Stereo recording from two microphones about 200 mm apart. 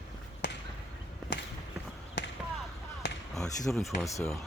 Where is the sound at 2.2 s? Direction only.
65° left (ahead or behind).